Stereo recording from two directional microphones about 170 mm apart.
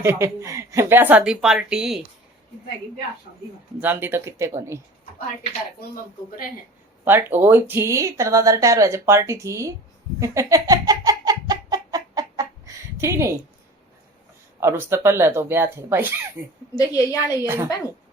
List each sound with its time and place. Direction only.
0.0 s speech: 15° right (ahead or behind)
3.8 s speech: 10° right (ahead or behind)
7.0 s speech: 10° right (ahead or behind)
10.2 s chicken: 20° right (ahead or behind)
14.6 s speech: 15° right (ahead or behind)
16.7 s a woman's voice: 20° left (ahead or behind)
17.4 s speech: 15° right (ahead or behind)